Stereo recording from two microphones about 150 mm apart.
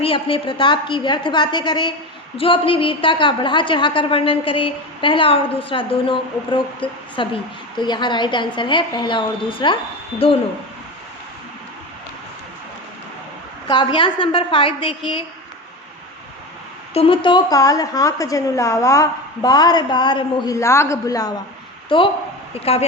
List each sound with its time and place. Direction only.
0.0 s a woman's voice: 35° left (ahead or behind)
13.7 s a woman's voice: 30° left (ahead or behind)
16.9 s a woman's voice: 40° left (ahead or behind); by 21.3 s 25° left (ahead or behind)
21.8 s a woman's voice: 35° left (ahead or behind)